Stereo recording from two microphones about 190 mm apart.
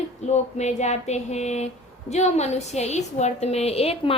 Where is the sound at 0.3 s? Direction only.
35° left (ahead or behind).